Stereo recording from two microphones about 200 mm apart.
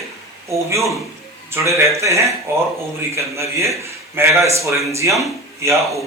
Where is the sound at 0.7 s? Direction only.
15° right (ahead or behind).